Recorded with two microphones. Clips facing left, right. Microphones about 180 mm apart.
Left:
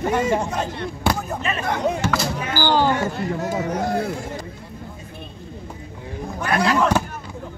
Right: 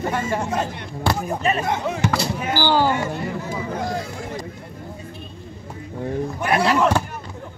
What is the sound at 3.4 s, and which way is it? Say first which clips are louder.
Vehicle: left 4 dB; 80° left.